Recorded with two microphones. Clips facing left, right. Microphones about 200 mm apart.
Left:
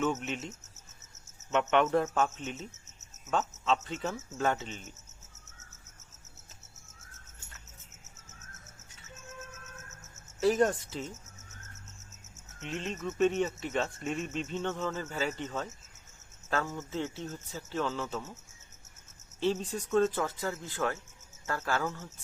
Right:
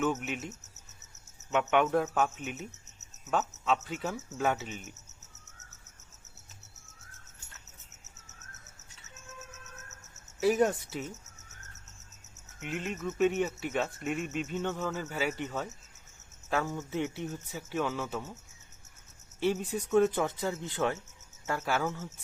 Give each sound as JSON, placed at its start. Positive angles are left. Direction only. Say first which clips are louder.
{"t": 0.0, "sound": "speech", "louder": "even", "side_deg": -5}
{"t": 10.4, "sound": "speech", "louder": "even", "side_deg": -5}
{"t": 12.5, "sound": "speech", "louder": "right 1 dB", "side_deg": -10}
{"t": 19.4, "sound": "speech", "louder": "right 1 dB", "side_deg": -10}